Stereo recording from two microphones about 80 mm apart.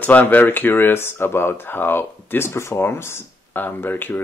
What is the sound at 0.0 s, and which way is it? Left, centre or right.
Speech, left.